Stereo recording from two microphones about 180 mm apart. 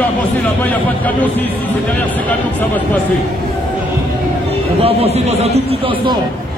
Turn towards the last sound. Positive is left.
turn(degrees=-30)  # may be behind; listen again after turning